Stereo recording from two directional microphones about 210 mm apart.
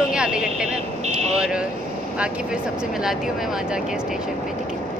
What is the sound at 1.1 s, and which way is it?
Speech, 30° right (ahead or behind).